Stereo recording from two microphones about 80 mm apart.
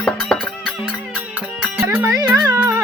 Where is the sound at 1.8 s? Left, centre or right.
Right.